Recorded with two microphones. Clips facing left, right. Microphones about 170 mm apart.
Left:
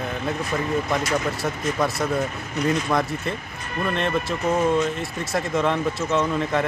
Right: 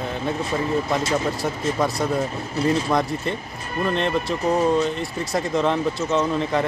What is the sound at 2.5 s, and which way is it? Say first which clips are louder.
Speech: right 2 dB; 30° right (ahead or behind).